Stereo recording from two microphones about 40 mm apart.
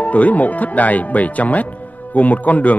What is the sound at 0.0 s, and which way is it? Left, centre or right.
Speech, left.